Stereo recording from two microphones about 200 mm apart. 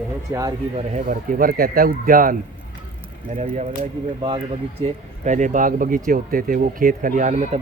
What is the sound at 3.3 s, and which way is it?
Speech, 35° right (ahead or behind).